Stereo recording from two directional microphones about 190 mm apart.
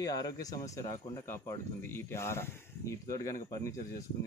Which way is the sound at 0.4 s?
20° left (ahead or behind).